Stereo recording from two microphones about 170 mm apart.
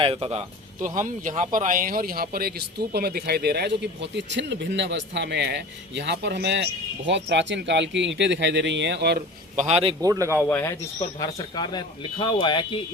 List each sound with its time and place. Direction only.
0.0 s speech: 35° right (ahead or behind)
0.8 s speech: 50° right (ahead or behind); by 6.7 s 80° right
7.1 s speech: 90° right
9.6 s speech: 40° right (ahead or behind)
10.0 s speech: 20° right (ahead or behind)
10.3 s speech: 15° left (ahead or behind)
11.2 s speech: 25° left (ahead or behind)